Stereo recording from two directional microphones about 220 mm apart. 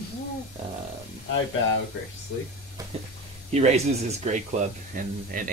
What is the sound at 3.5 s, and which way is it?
Speech, 30° right (ahead or behind).